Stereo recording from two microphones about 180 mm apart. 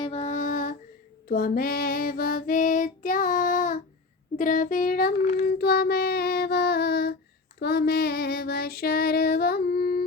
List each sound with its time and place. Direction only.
0.0 s music: 35° left (ahead or behind)
1.3 s female singing: 55° left (ahead or behind)
4.4 s child singing: 45° left (ahead or behind)